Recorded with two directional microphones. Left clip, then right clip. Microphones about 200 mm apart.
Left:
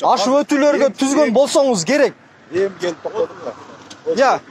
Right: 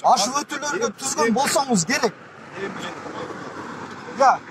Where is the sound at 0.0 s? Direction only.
25° left (ahead or behind).